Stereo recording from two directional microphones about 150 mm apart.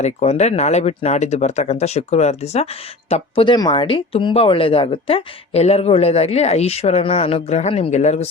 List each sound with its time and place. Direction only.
0.0 s speech: 45° left (ahead or behind)
3.1 s speech: 35° left (ahead or behind)